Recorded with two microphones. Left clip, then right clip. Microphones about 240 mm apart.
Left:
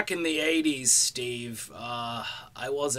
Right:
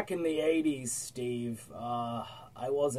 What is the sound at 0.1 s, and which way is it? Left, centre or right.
Speech, centre.